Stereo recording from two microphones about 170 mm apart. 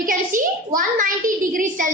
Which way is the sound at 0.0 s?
50° right (ahead or behind).